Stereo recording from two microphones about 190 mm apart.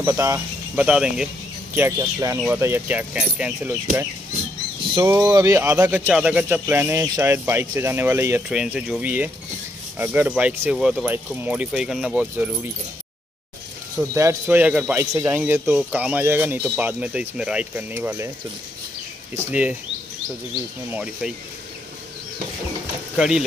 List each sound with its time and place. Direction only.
0.0 s speech: 15° right (ahead or behind)
1.8 s speech: 15° right (ahead or behind)
4.9 s speech: 20° right (ahead or behind)
13.9 s speech: 15° right (ahead or behind)
19.3 s speech: 10° right (ahead or behind)
20.9 s speech: 5° right (ahead or behind)
23.1 s speech: 5° right (ahead or behind)